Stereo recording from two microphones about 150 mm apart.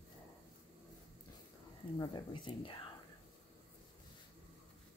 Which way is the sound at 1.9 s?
30° left (ahead or behind).